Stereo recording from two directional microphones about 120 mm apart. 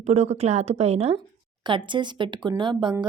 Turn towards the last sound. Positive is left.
turn(degrees=-40)  # may be behind; listen again after turning